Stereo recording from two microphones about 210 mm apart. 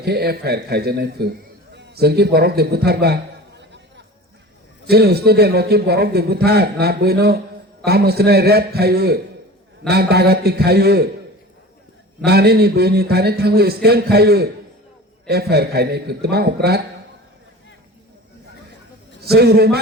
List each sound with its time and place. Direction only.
0.0 s a man's voice: 50° right (ahead or behind)
1.7 s a sound: 50° right (ahead or behind)
4.9 s a man's voice: 50° right (ahead or behind)
12.2 s a man's voice: 50° right (ahead or behind)
19.2 s a man's voice: 50° right (ahead or behind)